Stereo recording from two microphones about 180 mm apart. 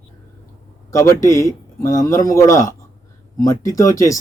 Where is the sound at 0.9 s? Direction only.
15° left (ahead or behind).